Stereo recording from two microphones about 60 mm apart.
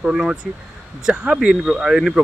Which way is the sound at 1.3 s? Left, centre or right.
Centre.